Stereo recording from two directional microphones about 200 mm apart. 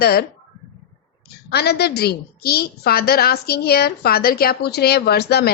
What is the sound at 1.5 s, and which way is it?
A woman's voice, 55° left (ahead or behind).